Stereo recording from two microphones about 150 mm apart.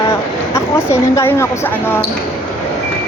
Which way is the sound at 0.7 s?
15° left (ahead or behind).